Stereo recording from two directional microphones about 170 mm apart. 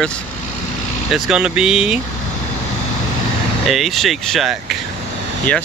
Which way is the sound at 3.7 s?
Centre (ahead or behind).